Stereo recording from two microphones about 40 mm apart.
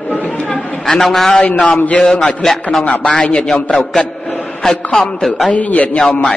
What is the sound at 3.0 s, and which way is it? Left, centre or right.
Speech, left.